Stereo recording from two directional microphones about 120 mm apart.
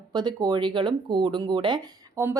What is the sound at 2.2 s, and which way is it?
Speech, 25° right (ahead or behind).